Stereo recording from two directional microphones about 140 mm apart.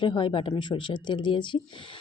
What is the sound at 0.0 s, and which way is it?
Speech, 35° left (ahead or behind).